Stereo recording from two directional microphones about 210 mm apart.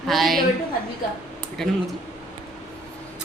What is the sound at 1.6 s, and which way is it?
Speech, centre (ahead or behind).